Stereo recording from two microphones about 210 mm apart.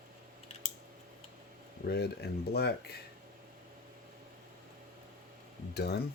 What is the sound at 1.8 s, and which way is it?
Speech, 50° left (ahead or behind).